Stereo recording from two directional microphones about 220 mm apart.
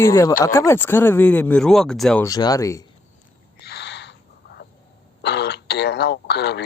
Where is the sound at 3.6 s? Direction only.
50° left (ahead or behind).